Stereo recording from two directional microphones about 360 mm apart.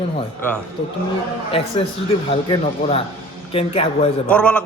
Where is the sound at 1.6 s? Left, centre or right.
Centre.